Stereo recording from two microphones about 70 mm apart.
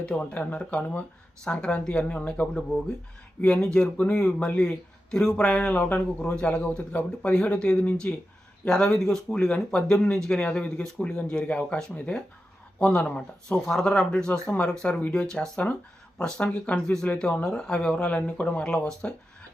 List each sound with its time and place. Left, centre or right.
0.0 s speech: centre